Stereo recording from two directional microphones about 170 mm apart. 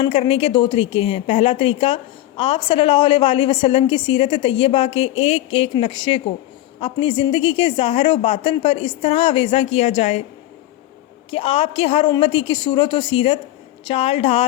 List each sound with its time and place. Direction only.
0.0 s a woman's voice: 30° left (ahead or behind)
11.3 s a woman's voice: 35° left (ahead or behind)